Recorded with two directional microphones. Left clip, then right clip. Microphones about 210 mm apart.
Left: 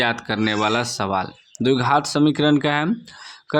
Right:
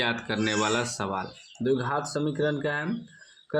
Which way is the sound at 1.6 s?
40° left (ahead or behind).